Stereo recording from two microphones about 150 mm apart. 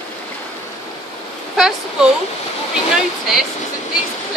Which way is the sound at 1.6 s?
5° right (ahead or behind).